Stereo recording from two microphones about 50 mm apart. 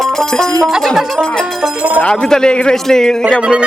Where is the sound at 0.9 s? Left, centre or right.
Centre.